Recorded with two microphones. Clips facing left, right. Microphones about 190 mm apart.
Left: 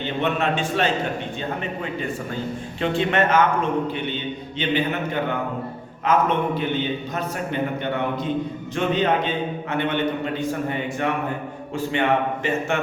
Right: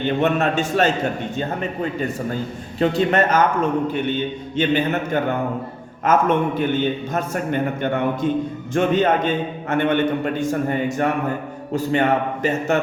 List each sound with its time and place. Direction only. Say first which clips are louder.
0.0 s a man's voice: right 4 dB; 45° right (ahead or behind)
4.5 s a man's voice: right 4 dB; 45° right (ahead or behind)
7.8 s a man's voice: right 4 dB; 50° right (ahead or behind)